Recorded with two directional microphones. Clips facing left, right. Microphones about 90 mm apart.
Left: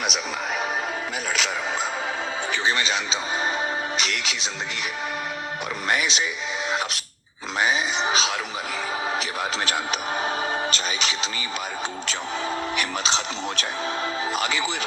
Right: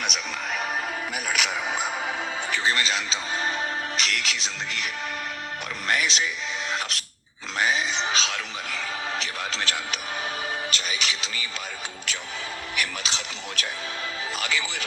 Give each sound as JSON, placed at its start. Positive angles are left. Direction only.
{"t": 0.0, "sound": "music", "side_deg": 5}
{"t": 1.3, "sound": "speech", "side_deg": -5}
{"t": 3.9, "sound": "music", "side_deg": 5}
{"t": 5.9, "sound": "speech", "side_deg": 5}
{"t": 7.6, "sound": "grunt", "side_deg": 5}
{"t": 8.0, "sound": "a sound", "side_deg": 10}
{"t": 9.1, "sound": "speech", "side_deg": 15}
{"t": 12.7, "sound": "speech", "side_deg": 25}